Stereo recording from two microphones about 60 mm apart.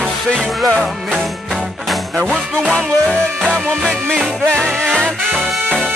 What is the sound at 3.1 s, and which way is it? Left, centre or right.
Music, centre.